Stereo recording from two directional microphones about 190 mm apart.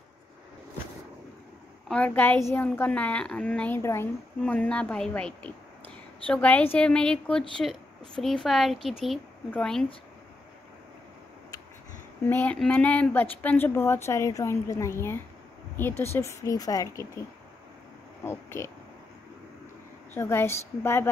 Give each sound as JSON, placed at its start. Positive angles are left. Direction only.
{"t": 1.9, "sound": "a woman's voice", "side_deg": 10}
{"t": 12.3, "sound": "a woman's voice", "side_deg": 10}
{"t": 18.2, "sound": "a woman's voice", "side_deg": 15}
{"t": 20.2, "sound": "a woman's voice", "side_deg": 10}